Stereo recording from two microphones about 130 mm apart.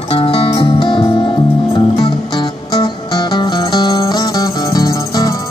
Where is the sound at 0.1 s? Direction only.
45° left (ahead or behind).